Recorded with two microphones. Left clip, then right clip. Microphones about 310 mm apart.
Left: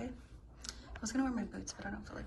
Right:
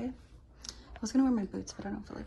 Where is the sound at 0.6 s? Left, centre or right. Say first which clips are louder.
Right 2 dB; centre.